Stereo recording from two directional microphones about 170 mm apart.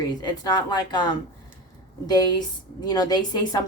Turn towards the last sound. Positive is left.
turn(degrees=25)  # may be behind; listen again after turning